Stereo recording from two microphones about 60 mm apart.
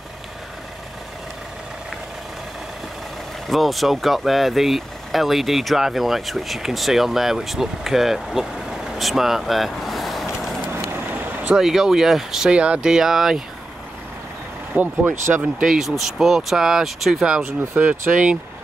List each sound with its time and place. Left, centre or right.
3.4 s speech: centre
11.5 s speech: centre
12.4 s speech: centre
14.8 s speech: right
15.6 s speech: centre
17.6 s speech: right